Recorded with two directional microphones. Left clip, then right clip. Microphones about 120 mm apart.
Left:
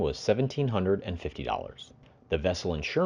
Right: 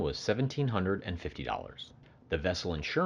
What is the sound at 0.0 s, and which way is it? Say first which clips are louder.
Speech: left 5 dB; 25° left (ahead or behind).